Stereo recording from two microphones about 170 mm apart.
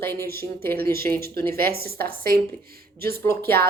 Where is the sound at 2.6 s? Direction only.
65° right (ahead or behind).